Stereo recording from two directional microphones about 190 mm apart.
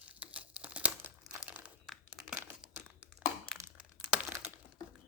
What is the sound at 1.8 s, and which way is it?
Crumpling, centre (ahead or behind).